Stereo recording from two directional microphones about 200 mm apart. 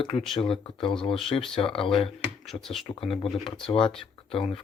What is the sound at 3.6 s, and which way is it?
Speech, 25° left (ahead or behind).